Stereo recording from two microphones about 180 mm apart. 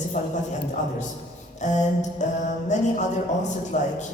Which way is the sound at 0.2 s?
40° left (ahead or behind).